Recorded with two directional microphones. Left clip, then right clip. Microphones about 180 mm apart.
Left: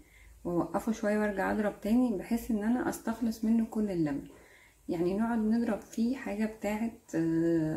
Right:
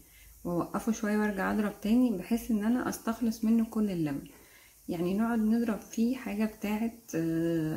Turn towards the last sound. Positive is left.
turn(degrees=-15)  # may be behind; listen again after turning